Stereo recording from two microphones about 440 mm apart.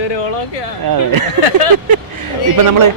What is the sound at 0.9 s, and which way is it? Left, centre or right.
Speech, right.